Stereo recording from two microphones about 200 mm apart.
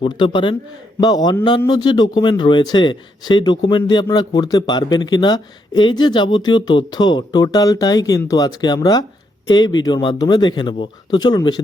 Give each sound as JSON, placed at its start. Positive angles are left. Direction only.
{"t": 0.0, "sound": "a man's voice", "side_deg": 25}